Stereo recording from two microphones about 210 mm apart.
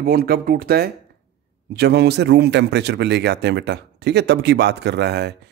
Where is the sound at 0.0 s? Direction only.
45° right (ahead or behind).